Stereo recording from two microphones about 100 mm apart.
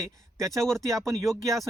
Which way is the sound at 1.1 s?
35° right (ahead or behind).